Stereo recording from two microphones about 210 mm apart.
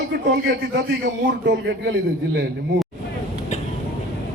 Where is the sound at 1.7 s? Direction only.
55° right (ahead or behind).